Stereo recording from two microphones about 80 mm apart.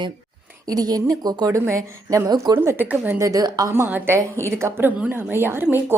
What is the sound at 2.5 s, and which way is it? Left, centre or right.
Speech, right.